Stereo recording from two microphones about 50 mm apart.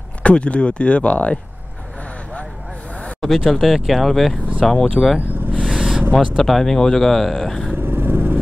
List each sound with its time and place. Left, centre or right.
0.2 s speech: left
3.2 s speech: centre
5.7 s vehicle: centre
6.1 s speech: centre
7.7 s vehicle: right